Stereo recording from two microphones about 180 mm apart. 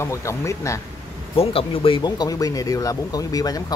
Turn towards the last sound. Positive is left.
turn(degrees=20)  # may be behind; listen again after turning